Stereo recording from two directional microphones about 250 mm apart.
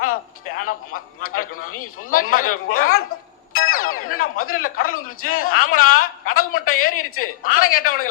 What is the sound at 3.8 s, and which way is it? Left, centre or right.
Music, left.